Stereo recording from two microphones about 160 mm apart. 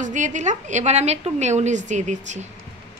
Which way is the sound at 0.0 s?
50° right (ahead or behind).